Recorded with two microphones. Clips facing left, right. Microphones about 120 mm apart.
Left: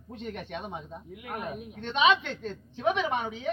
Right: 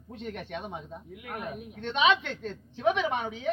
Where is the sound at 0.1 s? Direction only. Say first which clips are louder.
Even; 15° left (ahead or behind).